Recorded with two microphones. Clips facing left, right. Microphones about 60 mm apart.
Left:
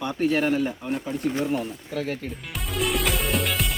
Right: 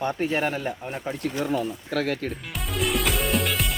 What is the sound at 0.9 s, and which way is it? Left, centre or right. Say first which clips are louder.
Speech: left 3 dB; right.